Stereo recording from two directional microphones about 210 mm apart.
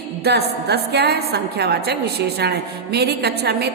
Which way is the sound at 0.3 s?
50° right (ahead or behind).